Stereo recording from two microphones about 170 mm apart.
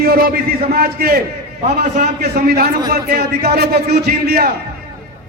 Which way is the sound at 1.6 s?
50° right (ahead or behind).